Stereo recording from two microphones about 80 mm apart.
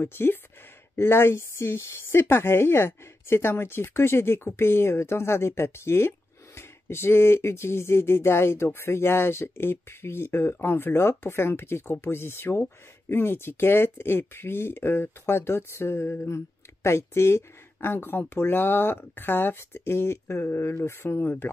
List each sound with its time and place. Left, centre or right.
0.0 s speech: left